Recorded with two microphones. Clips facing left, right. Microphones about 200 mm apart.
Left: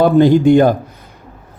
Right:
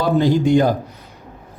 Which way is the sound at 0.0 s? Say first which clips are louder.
Left 7 dB; 55° left (ahead or behind).